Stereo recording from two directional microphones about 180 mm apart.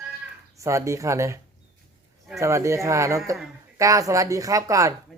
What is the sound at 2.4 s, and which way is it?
Speech, 15° right (ahead or behind).